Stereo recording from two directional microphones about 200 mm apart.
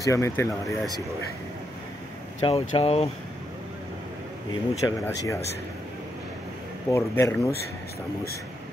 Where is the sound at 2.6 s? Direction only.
30° left (ahead or behind).